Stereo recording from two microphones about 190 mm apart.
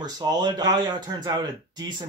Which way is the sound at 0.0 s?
20° right (ahead or behind).